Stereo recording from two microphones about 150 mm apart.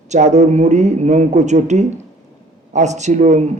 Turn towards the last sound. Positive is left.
turn(degrees=-55)  # may be behind; listen again after turning